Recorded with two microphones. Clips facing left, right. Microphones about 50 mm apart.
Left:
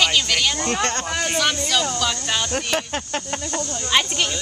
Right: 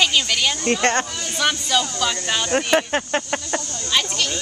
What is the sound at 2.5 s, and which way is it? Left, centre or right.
Speech, right.